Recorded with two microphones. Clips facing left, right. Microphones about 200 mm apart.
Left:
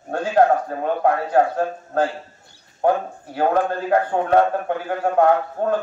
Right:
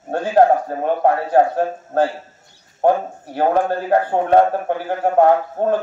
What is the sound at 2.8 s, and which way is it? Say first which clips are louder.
A man's voice: right 3 dB; 30° right (ahead or behind).